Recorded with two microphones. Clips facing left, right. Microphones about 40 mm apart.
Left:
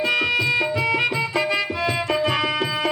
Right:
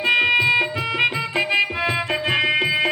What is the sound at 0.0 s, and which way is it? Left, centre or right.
Music, right.